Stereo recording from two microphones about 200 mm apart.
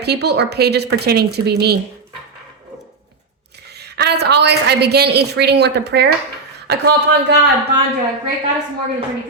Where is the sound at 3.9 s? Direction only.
55° right (ahead or behind).